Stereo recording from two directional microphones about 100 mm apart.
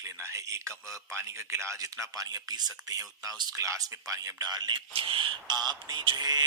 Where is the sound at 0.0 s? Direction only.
30° right (ahead or behind).